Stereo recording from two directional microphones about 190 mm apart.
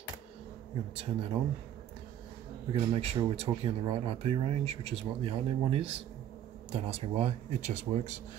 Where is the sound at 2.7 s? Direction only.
30° right (ahead or behind).